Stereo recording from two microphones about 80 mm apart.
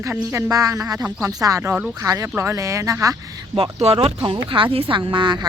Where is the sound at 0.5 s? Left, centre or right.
Right.